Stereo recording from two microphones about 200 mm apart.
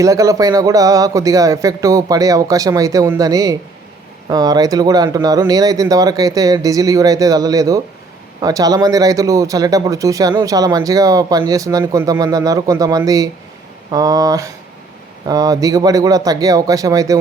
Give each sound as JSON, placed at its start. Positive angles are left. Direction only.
{"t": 0.0, "sound": "speech", "side_deg": -15}